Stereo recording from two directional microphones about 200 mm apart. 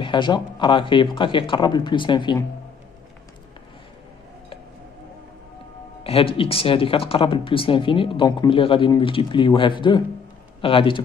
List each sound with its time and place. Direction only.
0.0 s speech: 25° left (ahead or behind)
6.0 s speech: 30° left (ahead or behind)